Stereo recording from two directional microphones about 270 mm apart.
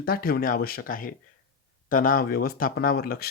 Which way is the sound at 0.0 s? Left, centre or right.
Left.